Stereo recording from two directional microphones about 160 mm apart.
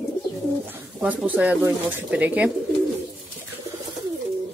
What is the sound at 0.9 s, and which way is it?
Speech, 10° right (ahead or behind).